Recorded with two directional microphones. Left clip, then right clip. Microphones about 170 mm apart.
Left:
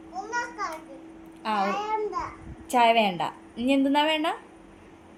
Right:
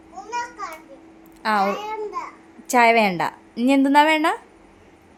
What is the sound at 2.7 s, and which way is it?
A woman's voice, 60° right (ahead or behind).